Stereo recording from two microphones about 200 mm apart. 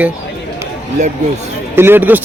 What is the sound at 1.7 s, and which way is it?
Speech, 10° right (ahead or behind).